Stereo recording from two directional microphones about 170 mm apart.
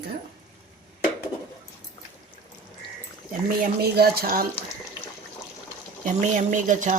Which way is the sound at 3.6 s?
65° right (ahead or behind).